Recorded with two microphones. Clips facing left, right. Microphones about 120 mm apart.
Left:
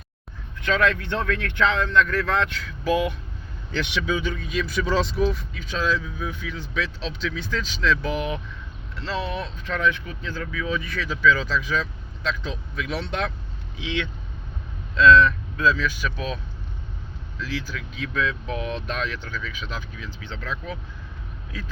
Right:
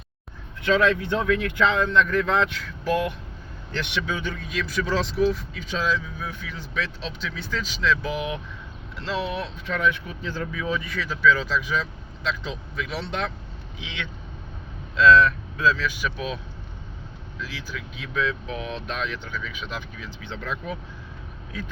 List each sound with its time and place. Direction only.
0.7 s speech: 20° right (ahead or behind)
2.6 s speech: 5° left (ahead or behind)
4.4 s speech: centre (ahead or behind)
10.2 s speech: 20° right (ahead or behind)
10.8 s speech: centre (ahead or behind)
14.9 s speech: 5° right (ahead or behind)
17.4 s speech: 10° right (ahead or behind)
19.4 s speech: 15° right (ahead or behind)